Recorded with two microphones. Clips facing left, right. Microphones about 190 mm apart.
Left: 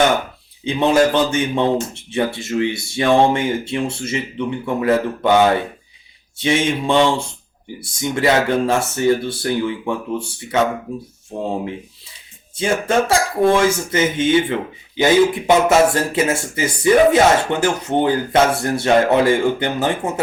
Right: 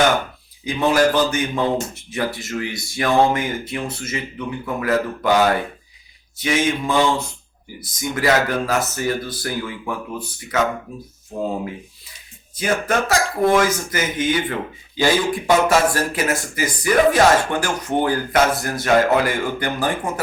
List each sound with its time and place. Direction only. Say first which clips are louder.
0.6 s speech: left 2 dB; 25° left (ahead or behind)
12.5 s speech: left 3 dB; 25° left (ahead or behind)